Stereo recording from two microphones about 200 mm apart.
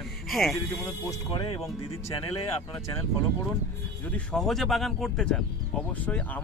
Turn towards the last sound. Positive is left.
turn(degrees=5)  # may be behind; listen again after turning